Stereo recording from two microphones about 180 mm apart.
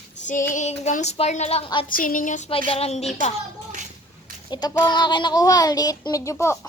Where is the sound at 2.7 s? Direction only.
35° left (ahead or behind).